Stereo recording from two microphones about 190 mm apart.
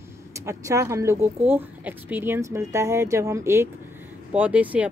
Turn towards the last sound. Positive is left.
turn(degrees=-5)  # may be behind; listen again after turning